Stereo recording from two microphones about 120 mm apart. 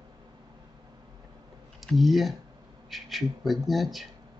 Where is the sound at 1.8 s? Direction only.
Centre (ahead or behind).